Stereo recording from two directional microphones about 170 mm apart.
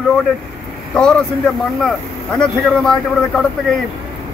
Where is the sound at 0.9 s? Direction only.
5° left (ahead or behind).